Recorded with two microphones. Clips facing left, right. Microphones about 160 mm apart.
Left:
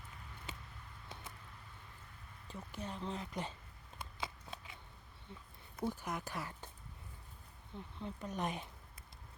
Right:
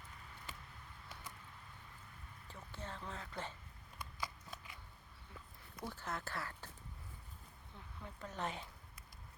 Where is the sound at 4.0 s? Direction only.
25° left (ahead or behind).